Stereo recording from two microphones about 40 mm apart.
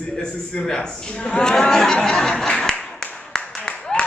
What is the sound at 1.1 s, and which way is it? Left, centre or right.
Speech, left.